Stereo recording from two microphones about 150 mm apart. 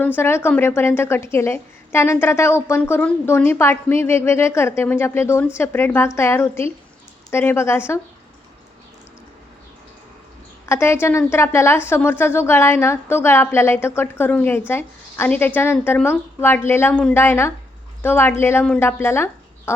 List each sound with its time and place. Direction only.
0.2 s a woman's voice: 15° left (ahead or behind)
10.7 s a woman's voice: 15° left (ahead or behind)